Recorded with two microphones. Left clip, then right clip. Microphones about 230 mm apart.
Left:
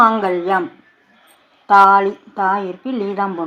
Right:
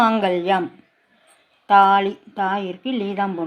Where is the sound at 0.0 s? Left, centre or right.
Right.